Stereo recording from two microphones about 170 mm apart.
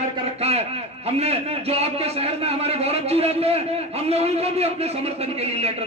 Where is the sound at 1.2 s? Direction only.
35° right (ahead or behind).